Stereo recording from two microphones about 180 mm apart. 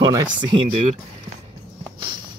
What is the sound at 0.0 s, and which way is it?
Speech, 25° right (ahead or behind).